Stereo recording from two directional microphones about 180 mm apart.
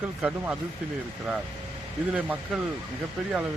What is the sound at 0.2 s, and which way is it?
Speech, 5° right (ahead or behind).